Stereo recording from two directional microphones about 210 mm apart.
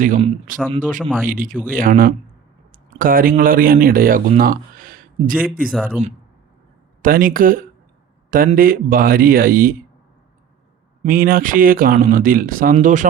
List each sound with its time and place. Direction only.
0.8 s speech: 40° right (ahead or behind)
5.6 s speech: 5° left (ahead or behind)
7.0 s speech: 40° right (ahead or behind)
11.0 s speech: 45° right (ahead or behind)